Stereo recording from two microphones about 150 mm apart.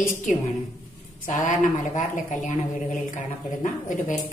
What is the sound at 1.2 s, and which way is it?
A woman's voice, 60° left (ahead or behind).